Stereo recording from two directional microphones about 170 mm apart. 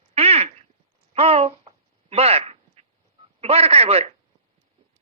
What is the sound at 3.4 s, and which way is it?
Speech, 35° right (ahead or behind).